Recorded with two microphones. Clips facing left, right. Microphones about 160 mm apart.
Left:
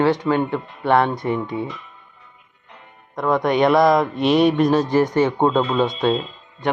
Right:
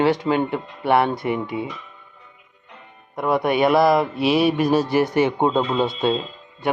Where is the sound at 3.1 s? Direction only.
10° right (ahead or behind).